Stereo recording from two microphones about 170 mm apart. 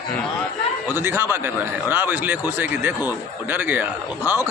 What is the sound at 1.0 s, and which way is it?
Speech, 15° right (ahead or behind).